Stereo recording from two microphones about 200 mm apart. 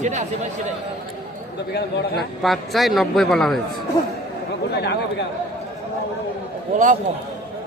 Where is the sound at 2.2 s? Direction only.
Centre (ahead or behind).